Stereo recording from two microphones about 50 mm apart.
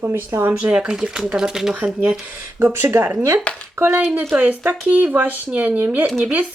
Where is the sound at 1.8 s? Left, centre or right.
Right.